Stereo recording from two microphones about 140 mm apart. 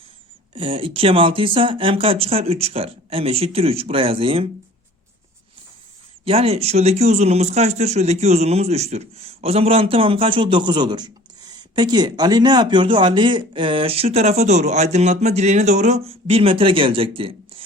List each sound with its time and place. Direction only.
0.5 s speech: 40° right (ahead or behind)
6.2 s speech: 45° right (ahead or behind)